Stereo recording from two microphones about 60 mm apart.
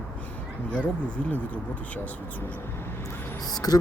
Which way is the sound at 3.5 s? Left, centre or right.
Left.